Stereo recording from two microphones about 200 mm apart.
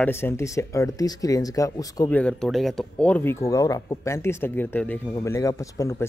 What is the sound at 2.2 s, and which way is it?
Speech, 5° left (ahead or behind).